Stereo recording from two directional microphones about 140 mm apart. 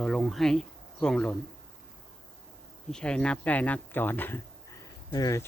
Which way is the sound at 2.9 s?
5° left (ahead or behind).